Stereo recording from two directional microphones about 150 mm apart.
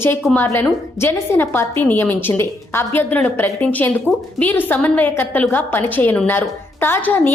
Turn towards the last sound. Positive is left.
turn(degrees=15)  # may be behind; listen again after turning